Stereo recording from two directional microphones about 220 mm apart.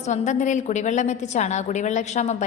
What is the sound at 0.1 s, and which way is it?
A woman's voice, 35° left (ahead or behind).